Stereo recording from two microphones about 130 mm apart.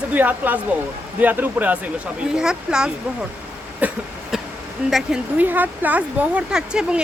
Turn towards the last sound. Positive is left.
turn(degrees=-5)  # may be behind; listen again after turning